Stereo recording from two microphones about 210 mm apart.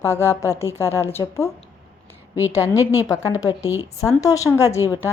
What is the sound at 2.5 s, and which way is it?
A woman's voice, 15° left (ahead or behind).